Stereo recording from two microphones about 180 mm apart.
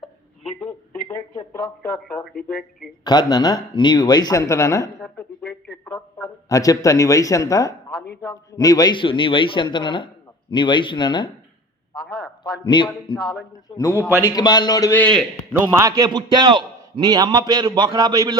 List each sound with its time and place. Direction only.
1.0 s speech: 15° left (ahead or behind)
3.0 s speech: 20° left (ahead or behind)
4.9 s a man's voice: 5° left (ahead or behind); by 11.3 s 25° left (ahead or behind)
11.9 s a sound: 5° left (ahead or behind)
12.6 s a man's voice: 25° left (ahead or behind); by 15.3 s 5° left (ahead or behind)
15.7 s a man's voice: 20° right (ahead or behind)